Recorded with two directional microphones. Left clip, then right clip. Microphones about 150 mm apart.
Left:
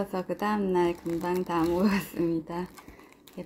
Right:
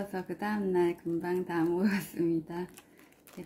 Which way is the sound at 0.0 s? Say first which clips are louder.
Left 6 dB; 15° left (ahead or behind).